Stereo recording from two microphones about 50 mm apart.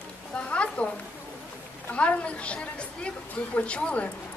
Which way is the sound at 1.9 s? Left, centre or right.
Left.